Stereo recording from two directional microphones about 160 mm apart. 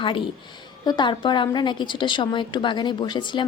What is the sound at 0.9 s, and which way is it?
A woman's voice, 30° left (ahead or behind).